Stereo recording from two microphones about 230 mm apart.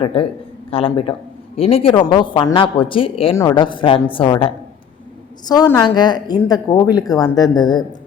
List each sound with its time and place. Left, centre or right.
0.0 s a woman's voice: left